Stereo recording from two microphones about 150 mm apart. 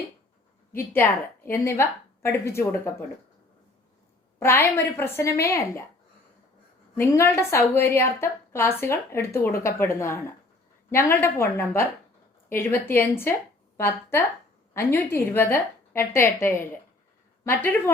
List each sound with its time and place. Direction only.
0.8 s a woman's voice: 15° left (ahead or behind)
4.4 s a woman's voice: 15° left (ahead or behind)
6.9 s a woman's voice: 15° left (ahead or behind)